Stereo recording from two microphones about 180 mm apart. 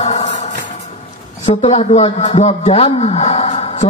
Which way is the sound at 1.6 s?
35° left (ahead or behind).